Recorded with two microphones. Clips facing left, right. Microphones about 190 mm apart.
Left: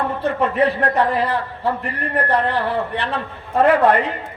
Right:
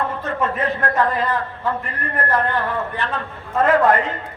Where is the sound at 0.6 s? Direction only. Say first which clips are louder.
Left 4 dB; 35° left (ahead or behind).